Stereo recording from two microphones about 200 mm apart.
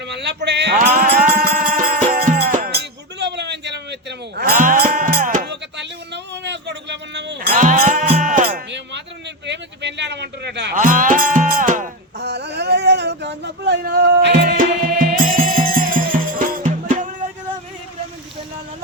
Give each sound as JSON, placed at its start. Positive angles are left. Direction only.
{"t": 0.1, "sound": "music", "side_deg": -55}
{"t": 2.6, "sound": "music", "side_deg": -55}
{"t": 4.4, "sound": "music", "side_deg": -45}
{"t": 6.3, "sound": "music", "side_deg": -60}
{"t": 9.5, "sound": "a sound", "side_deg": -60}
{"t": 10.8, "sound": "music", "side_deg": -40}
{"t": 12.2, "sound": "a sound", "side_deg": -55}
{"t": 14.3, "sound": "music", "side_deg": -40}